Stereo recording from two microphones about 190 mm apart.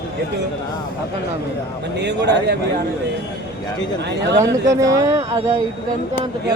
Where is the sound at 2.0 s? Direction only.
65° right (ahead or behind).